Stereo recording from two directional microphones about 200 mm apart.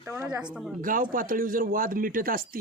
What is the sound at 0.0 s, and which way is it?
Speech, 10° right (ahead or behind).